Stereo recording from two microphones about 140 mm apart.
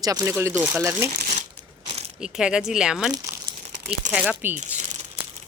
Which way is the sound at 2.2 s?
5° right (ahead or behind).